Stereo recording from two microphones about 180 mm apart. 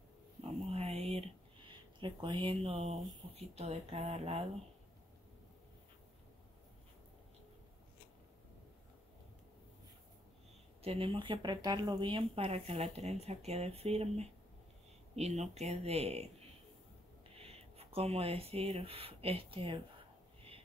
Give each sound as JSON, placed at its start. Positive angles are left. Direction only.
{"t": 0.4, "sound": "a sound", "side_deg": -35}
{"t": 1.7, "sound": "speech", "side_deg": -25}
{"t": 10.8, "sound": "speech", "side_deg": -30}